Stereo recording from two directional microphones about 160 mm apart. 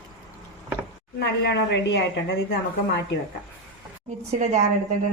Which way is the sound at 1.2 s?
90° left.